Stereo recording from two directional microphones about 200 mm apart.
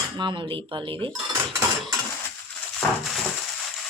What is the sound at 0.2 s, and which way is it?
Cutlery, 20° right (ahead or behind).